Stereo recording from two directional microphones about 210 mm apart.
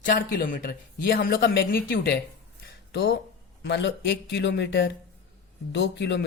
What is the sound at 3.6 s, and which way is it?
Speech, 55° left (ahead or behind).